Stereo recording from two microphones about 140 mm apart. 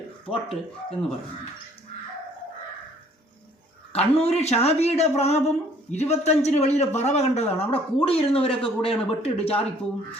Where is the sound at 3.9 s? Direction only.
45° left (ahead or behind).